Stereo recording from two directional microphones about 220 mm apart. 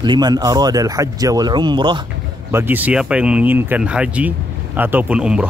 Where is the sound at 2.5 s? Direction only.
10° right (ahead or behind).